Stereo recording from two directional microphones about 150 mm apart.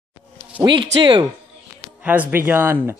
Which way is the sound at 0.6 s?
35° right (ahead or behind).